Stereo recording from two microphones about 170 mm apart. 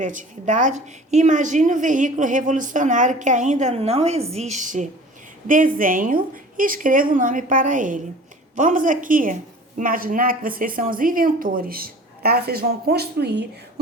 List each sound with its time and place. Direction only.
0.0 s a woman's voice: 50° right (ahead or behind); by 13.5 s 80° right